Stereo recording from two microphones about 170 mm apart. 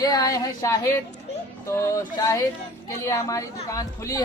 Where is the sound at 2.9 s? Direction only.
20° left (ahead or behind).